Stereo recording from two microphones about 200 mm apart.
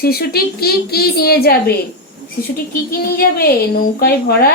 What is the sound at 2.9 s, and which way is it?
A woman's voice, 50° left (ahead or behind).